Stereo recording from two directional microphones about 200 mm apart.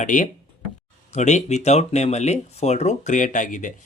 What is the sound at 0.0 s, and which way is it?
Speech, 40° left (ahead or behind).